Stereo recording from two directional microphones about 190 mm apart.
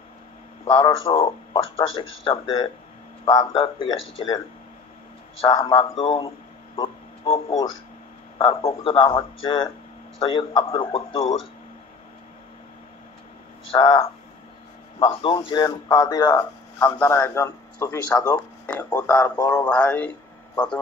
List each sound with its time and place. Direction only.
0.7 s speech: 25° left (ahead or behind)
5.4 s speech: 30° left (ahead or behind)
6.8 s a sound: 30° left (ahead or behind)
8.4 s speech: 30° left (ahead or behind)
13.7 s speech: 25° left (ahead or behind); by 20.8 s 5° left (ahead or behind)